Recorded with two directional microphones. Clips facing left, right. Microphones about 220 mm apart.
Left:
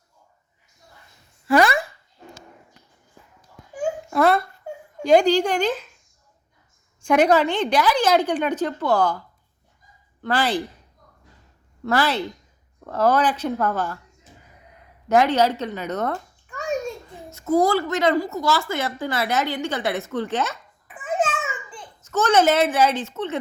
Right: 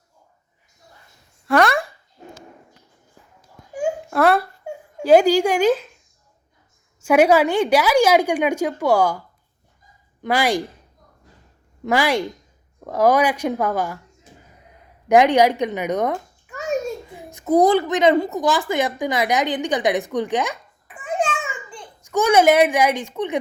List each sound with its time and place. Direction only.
1.5 s a sound: centre (ahead or behind)
3.8 s babbling: centre (ahead or behind)
4.9 s a woman's voice: 5° right (ahead or behind)
7.0 s a woman's voice: 10° right (ahead or behind)
10.2 s a woman's voice: 10° right (ahead or behind)
11.9 s a woman's voice: 15° right (ahead or behind)
15.1 s a child's voice: 15° right (ahead or behind)
20.8 s babbling: centre (ahead or behind)
22.0 s a woman's voice: 10° right (ahead or behind)